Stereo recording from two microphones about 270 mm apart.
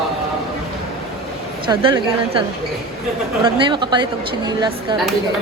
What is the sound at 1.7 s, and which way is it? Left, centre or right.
Speech, centre.